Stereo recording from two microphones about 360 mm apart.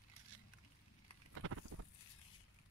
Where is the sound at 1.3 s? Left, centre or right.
Right.